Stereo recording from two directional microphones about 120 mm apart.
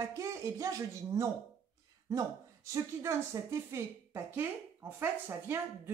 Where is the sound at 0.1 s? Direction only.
30° right (ahead or behind).